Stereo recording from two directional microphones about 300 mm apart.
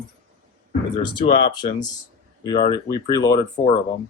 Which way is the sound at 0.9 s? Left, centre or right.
Centre.